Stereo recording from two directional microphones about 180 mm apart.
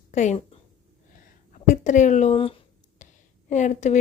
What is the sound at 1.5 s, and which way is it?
Speech, 45° left (ahead or behind).